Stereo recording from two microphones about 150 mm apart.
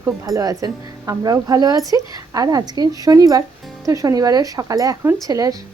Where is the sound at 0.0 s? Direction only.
20° right (ahead or behind).